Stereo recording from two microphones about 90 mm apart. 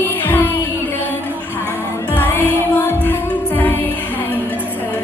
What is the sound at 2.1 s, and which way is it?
Music, 20° left (ahead or behind).